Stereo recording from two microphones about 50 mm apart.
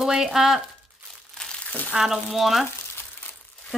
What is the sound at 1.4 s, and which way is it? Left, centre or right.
Crumpling, left.